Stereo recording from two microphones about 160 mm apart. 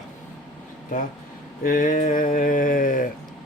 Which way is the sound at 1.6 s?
60° left (ahead or behind).